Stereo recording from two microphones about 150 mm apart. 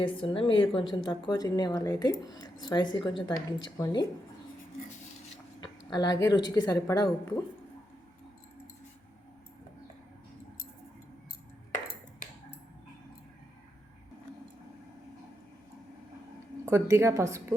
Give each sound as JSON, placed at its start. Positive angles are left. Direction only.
{"t": 0.0, "sound": "a woman's voice", "side_deg": 35}
{"t": 5.5, "sound": "a woman's voice", "side_deg": 30}
{"t": 16.6, "sound": "a woman's voice", "side_deg": -20}